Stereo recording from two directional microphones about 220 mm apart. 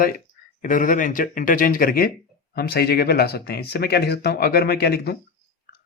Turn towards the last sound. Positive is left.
turn(degrees=45)  # may be behind; listen again after turning